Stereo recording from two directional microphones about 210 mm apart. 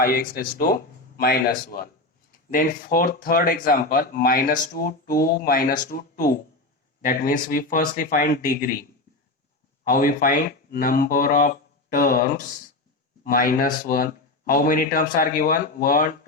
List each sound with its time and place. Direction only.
0.0 s speech: 45° left (ahead or behind)